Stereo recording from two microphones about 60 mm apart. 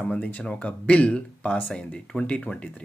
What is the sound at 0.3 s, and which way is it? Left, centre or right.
Speech, centre.